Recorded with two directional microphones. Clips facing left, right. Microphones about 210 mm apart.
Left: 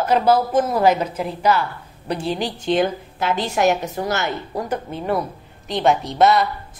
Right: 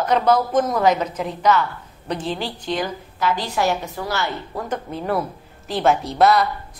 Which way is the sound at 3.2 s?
25° left (ahead or behind).